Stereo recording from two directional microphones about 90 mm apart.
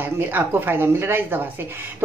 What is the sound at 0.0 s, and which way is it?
Speech, 20° right (ahead or behind).